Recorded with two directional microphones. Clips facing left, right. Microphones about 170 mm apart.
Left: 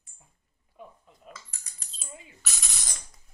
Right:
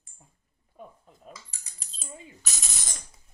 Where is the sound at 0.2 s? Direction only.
40° right (ahead or behind).